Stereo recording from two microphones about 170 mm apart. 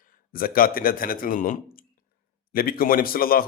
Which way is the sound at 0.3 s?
60° left (ahead or behind).